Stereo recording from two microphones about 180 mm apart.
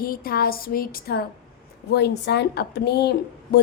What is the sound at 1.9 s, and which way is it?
A woman's voice, 70° left (ahead or behind).